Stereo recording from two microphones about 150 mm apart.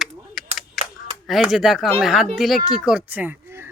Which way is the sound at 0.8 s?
Centre (ahead or behind).